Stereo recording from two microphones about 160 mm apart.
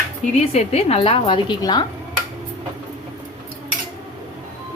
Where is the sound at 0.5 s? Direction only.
40° left (ahead or behind).